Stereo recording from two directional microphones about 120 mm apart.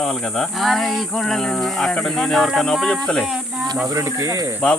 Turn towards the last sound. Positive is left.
turn(degrees=-25)  # may be behind; listen again after turning